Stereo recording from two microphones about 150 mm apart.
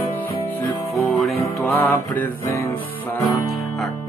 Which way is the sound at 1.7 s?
10° left (ahead or behind).